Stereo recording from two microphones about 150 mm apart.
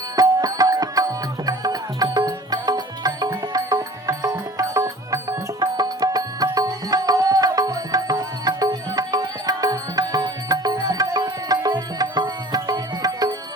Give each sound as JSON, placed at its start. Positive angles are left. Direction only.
{"t": 0.2, "sound": "music", "side_deg": -25}